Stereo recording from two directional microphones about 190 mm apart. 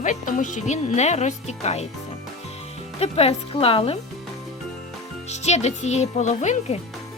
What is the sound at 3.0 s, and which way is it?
Speech, 30° left (ahead or behind).